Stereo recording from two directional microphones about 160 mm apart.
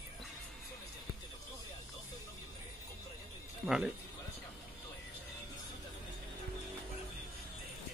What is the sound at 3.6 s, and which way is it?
Speech, 5° right (ahead or behind).